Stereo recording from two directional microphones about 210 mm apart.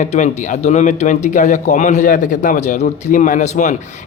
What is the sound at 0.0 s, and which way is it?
A man's voice, 35° left (ahead or behind).